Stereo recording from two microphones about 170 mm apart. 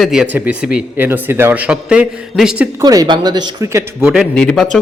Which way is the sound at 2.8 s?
20° right (ahead or behind).